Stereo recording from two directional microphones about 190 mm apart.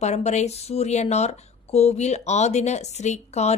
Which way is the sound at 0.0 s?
35° left (ahead or behind).